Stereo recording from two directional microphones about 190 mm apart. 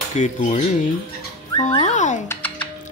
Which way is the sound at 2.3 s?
10° left (ahead or behind).